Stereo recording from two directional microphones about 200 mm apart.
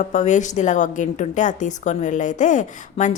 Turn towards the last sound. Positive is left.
turn(degrees=40)  # may be behind; listen again after turning